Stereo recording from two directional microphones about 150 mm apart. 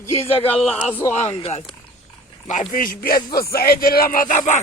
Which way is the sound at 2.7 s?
70° left (ahead or behind).